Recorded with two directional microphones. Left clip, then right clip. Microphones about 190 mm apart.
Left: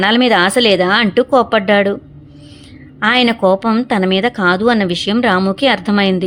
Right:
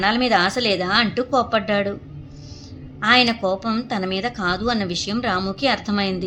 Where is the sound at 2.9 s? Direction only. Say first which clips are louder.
Left 4 dB; 45° left (ahead or behind).